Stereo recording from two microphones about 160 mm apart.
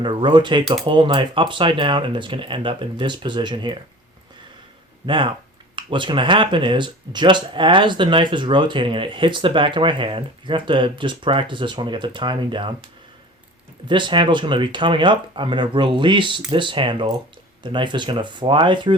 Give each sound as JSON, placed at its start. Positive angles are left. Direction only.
{"t": 0.0, "sound": "speech", "side_deg": -30}
{"t": 5.0, "sound": "speech", "side_deg": -30}
{"t": 13.8, "sound": "speech", "side_deg": -30}